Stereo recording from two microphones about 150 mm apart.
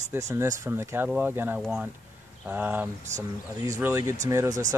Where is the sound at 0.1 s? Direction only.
20° right (ahead or behind).